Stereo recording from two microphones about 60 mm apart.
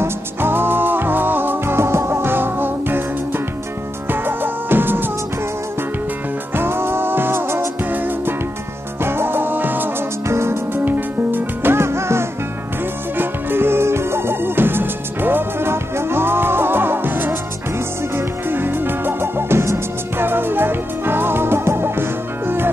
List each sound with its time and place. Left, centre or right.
0.0 s music: right
6.5 s music: right
10.2 s music: right
13.2 s music: right
20.2 s music: right